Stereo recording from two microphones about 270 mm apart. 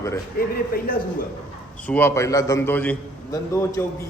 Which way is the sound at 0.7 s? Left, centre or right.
Left.